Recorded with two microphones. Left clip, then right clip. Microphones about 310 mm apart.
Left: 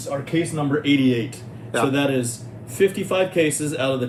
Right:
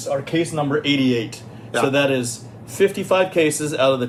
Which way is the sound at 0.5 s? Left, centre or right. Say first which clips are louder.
Even; centre.